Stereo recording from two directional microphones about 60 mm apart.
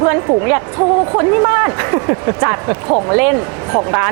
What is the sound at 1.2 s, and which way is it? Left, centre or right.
Speech, right.